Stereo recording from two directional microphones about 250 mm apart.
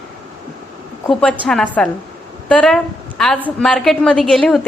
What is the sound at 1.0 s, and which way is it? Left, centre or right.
A woman's voice, centre.